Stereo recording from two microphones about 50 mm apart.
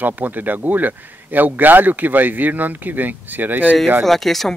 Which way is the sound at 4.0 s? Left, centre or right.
Centre.